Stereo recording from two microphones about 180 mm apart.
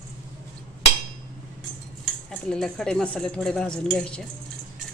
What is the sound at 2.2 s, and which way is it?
Speech, 5° left (ahead or behind).